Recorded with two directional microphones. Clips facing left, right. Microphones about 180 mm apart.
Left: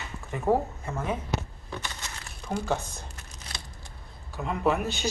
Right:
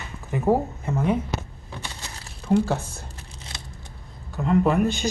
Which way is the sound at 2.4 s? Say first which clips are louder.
Right 8 dB; 5° right (ahead or behind).